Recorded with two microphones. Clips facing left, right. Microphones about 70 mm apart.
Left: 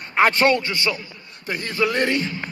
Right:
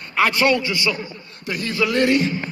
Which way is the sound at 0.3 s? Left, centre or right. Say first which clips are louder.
Even; left.